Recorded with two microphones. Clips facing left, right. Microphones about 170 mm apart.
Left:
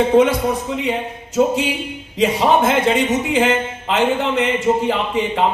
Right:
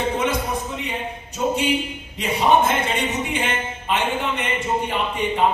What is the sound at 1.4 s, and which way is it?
Speech, 90° left.